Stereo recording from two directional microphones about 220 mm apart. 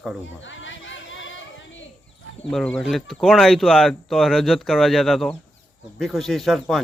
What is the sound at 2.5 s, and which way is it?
Speech, 5° left (ahead or behind).